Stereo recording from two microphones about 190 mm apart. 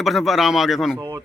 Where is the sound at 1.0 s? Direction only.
20° right (ahead or behind).